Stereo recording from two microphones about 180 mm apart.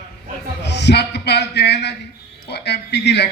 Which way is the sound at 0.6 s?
70° left (ahead or behind).